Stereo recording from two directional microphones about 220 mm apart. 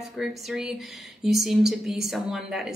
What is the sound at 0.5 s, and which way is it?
Speech, centre (ahead or behind).